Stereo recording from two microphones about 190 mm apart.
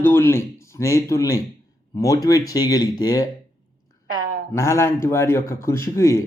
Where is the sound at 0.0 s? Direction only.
10° left (ahead or behind).